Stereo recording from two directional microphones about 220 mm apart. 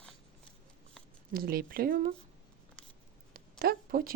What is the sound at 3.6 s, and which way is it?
Speech, 40° right (ahead or behind).